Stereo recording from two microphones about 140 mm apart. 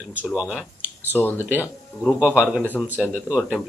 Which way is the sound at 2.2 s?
5° right (ahead or behind).